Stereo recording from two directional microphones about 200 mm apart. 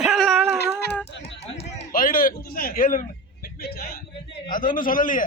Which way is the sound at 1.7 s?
45° left (ahead or behind).